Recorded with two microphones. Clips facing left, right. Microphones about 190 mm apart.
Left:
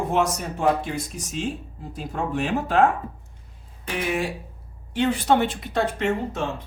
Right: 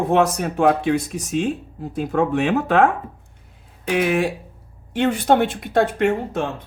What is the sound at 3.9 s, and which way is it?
Speech, 70° right (ahead or behind).